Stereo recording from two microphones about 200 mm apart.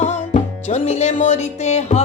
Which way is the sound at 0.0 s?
35° left (ahead or behind).